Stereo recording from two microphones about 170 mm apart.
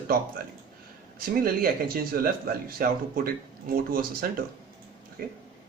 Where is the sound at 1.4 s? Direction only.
60° right (ahead or behind).